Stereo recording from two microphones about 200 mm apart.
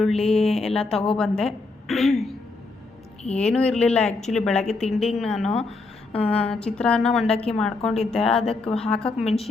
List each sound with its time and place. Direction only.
0.0 s a woman's voice: centre (ahead or behind)
6.5 s a woman's voice: 5° left (ahead or behind)